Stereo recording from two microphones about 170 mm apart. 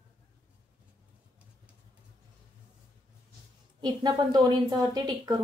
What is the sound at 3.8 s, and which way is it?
A woman's voice, 25° right (ahead or behind).